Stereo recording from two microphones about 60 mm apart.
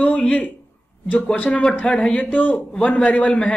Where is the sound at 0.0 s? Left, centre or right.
Centre.